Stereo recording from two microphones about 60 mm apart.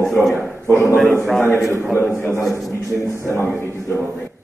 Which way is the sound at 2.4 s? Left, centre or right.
Centre.